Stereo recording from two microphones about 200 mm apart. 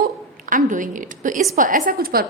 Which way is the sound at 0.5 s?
40° right (ahead or behind).